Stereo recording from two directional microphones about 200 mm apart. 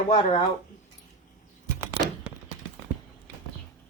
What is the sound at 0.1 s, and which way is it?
Speech, 35° left (ahead or behind).